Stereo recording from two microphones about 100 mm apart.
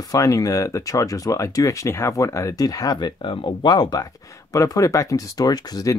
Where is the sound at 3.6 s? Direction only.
40° left (ahead or behind).